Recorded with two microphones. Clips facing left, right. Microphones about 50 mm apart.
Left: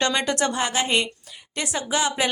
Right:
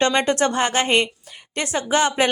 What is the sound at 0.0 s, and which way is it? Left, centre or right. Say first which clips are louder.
A woman's voice: right 4 dB; right.